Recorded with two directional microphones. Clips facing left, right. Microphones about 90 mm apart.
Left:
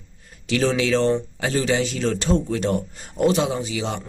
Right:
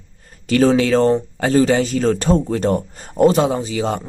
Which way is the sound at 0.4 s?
45° right (ahead or behind).